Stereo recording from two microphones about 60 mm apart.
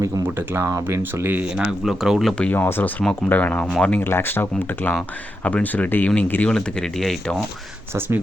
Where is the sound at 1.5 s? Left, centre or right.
Centre.